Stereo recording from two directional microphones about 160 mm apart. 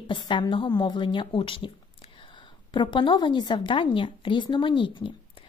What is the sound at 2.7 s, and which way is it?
Speech, 30° left (ahead or behind).